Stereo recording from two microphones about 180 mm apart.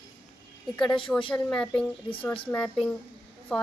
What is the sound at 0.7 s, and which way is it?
Speech, 5° left (ahead or behind).